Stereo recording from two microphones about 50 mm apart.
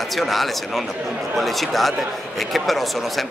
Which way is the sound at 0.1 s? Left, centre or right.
Centre.